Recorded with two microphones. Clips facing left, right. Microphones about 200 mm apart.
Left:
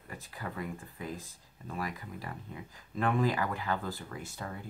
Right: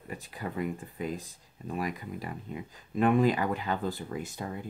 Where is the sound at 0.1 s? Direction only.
20° right (ahead or behind).